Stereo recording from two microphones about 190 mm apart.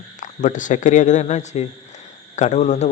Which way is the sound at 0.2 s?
40° left (ahead or behind).